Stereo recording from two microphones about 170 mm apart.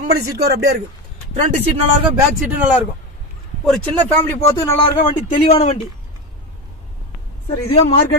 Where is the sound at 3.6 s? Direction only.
5° left (ahead or behind).